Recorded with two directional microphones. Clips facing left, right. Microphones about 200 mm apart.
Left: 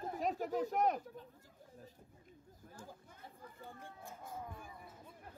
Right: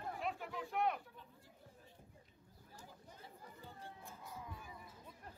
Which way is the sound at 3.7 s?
50° left (ahead or behind).